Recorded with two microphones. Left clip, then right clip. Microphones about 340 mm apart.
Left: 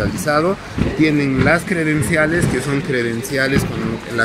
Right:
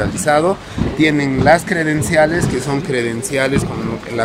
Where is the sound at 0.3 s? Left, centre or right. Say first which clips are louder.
Right 3 dB; right.